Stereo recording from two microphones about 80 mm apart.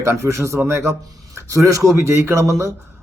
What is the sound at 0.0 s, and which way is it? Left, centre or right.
A man's voice, right.